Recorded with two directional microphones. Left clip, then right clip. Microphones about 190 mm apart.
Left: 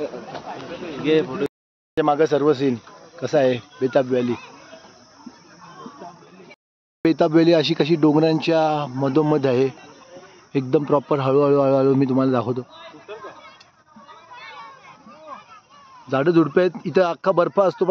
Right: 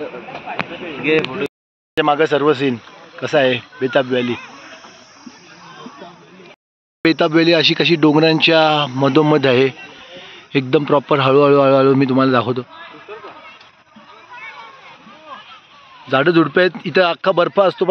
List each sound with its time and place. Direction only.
1.0 s speech: 30° left (ahead or behind)
2.0 s speech: centre (ahead or behind)
4.5 s snake: 70° left (ahead or behind)
7.0 s a man's voice: 5° left (ahead or behind)
16.1 s a man's voice: centre (ahead or behind)